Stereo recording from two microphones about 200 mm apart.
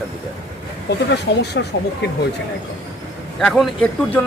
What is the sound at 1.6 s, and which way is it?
Speech, 60° left (ahead or behind).